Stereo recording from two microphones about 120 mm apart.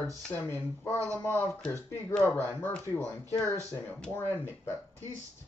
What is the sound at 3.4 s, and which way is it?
Speech, 25° left (ahead or behind).